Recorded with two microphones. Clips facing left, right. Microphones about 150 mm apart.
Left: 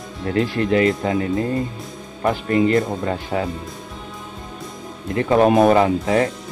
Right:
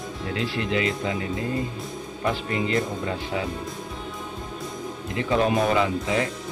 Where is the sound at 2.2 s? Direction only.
50° left (ahead or behind).